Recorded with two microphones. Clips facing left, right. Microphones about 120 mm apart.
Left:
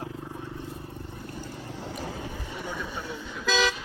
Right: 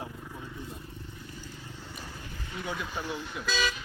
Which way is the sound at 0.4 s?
60° left (ahead or behind).